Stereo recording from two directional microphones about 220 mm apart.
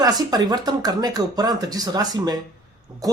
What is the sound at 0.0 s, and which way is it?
A woman's voice, 15° right (ahead or behind).